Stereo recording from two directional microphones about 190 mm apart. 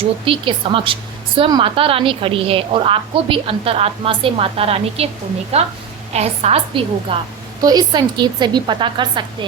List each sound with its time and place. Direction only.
0.0 s a woman's voice: 30° right (ahead or behind)